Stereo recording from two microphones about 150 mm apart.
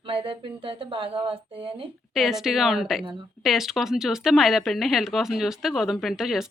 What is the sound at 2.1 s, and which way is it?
Speech, centre (ahead or behind).